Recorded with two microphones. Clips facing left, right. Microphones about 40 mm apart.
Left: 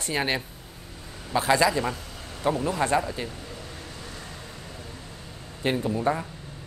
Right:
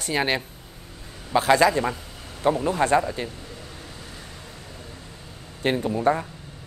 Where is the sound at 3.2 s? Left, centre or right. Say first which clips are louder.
Even; centre.